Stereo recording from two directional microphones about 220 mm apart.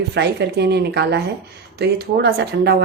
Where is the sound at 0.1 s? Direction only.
50° right (ahead or behind).